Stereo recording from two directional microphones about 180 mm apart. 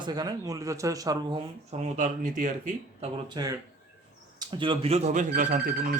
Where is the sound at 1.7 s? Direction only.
40° right (ahead or behind).